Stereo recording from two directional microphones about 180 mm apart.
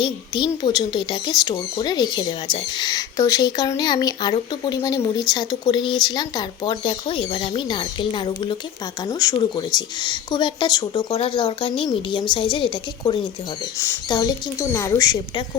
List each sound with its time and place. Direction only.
0.0 s speech: 25° left (ahead or behind)
13.7 s speech: 15° left (ahead or behind)